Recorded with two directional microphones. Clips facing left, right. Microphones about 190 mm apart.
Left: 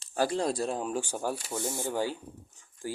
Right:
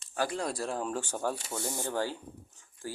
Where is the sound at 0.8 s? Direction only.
10° left (ahead or behind).